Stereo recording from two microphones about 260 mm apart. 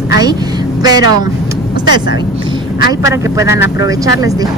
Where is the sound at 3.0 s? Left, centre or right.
Centre.